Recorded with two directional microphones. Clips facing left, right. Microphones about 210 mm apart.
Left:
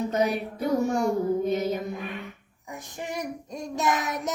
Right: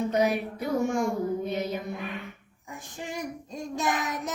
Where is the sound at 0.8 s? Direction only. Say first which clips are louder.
Even; 40° left (ahead or behind).